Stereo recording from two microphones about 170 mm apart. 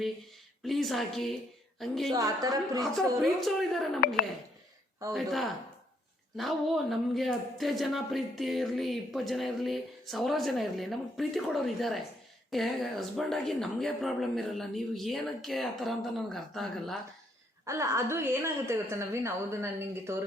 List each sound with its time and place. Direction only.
0.6 s speech: centre (ahead or behind)
2.1 s a woman's voice: 20° right (ahead or behind)
2.8 s speech: centre (ahead or behind)
5.1 s speech: centre (ahead or behind)
17.7 s a woman's voice: 15° right (ahead or behind)